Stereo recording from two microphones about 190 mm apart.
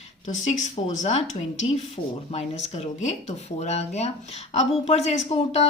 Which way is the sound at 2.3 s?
35° left (ahead or behind).